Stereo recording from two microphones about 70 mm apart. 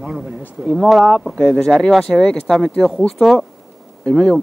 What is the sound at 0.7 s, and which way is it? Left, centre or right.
Speech, centre.